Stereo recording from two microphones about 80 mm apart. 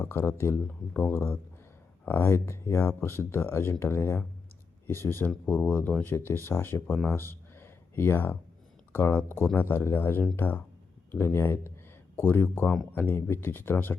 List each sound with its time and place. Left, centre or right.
0.0 s speech: left
6.9 s a man's voice: centre
7.2 s a sound: left
8.9 s speech: left